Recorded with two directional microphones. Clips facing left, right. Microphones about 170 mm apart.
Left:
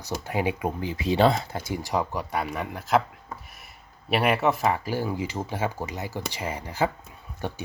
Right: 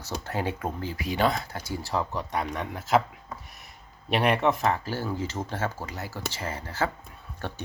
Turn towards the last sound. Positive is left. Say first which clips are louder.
# left 3 dB
turn(degrees=15)  # may be behind; listen again after turning